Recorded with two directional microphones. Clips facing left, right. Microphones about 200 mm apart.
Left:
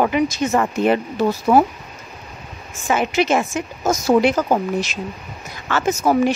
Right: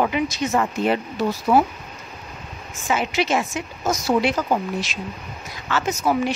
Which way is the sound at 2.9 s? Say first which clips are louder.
Left 4 dB; 50° left (ahead or behind).